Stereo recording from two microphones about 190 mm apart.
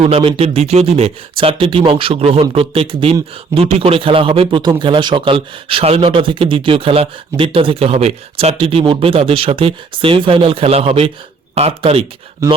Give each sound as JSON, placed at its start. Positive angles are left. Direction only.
{"t": 0.0, "sound": "a man's voice", "side_deg": -30}